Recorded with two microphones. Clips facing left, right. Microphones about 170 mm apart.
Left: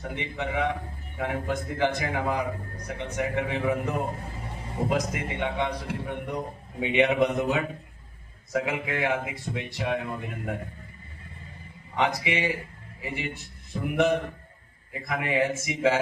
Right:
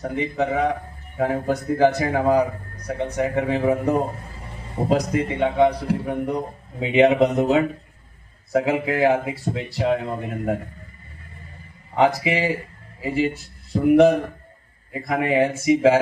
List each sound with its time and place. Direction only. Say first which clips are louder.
0.0 s a man's voice: right 9 dB; 40° right (ahead or behind)
11.9 s a man's voice: right 7 dB; 35° right (ahead or behind)
13.7 s speech: right 11 dB; 45° right (ahead or behind)
14.9 s a man's voice: right 7 dB; 30° right (ahead or behind)
15.6 s a sound: right 9 dB; 30° right (ahead or behind)